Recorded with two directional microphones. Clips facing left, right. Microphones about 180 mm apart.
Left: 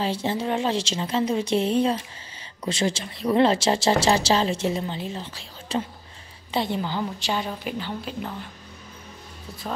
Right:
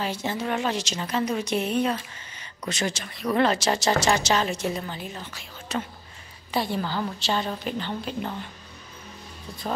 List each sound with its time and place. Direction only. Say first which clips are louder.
0.0 s a woman's voice: left 3 dB; 30° left (ahead or behind); by 8.5 s centre (ahead or behind)